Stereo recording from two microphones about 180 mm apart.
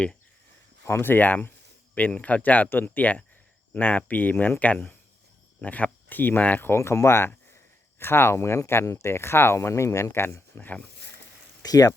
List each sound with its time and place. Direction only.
0.9 s speech: 10° left (ahead or behind)
11.6 s speech: 20° left (ahead or behind)